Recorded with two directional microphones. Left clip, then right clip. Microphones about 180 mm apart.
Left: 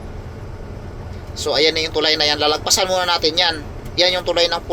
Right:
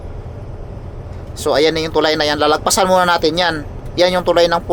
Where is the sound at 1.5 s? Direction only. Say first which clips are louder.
Right 3 dB; 50° right (ahead or behind).